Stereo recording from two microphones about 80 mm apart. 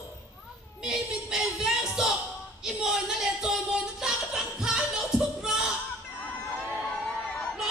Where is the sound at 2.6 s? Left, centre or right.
Centre.